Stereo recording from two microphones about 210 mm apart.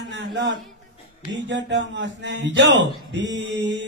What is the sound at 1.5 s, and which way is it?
Mantra, 60° right (ahead or behind).